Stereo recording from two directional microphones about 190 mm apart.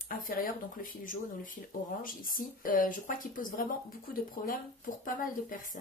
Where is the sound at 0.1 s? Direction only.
50° left (ahead or behind).